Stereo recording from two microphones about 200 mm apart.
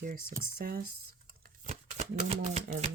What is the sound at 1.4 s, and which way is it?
Shuffling cards, 40° right (ahead or behind).